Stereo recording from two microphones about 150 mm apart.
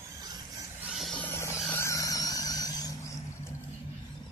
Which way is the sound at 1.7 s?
20° left (ahead or behind).